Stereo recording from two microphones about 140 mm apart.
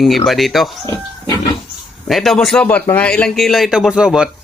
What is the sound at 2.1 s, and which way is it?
Speech, centre (ahead or behind).